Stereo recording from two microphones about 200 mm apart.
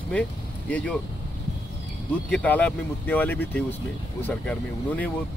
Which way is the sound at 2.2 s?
5° left (ahead or behind).